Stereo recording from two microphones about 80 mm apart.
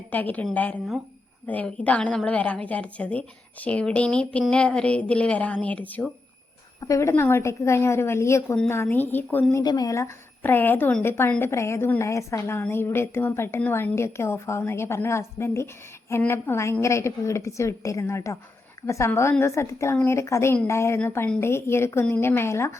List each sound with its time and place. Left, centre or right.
0.1 s a woman's voice: left
6.7 s a woman's voice: left
9.6 s speech: left
10.4 s a woman's voice: left
12.4 s a woman's voice: left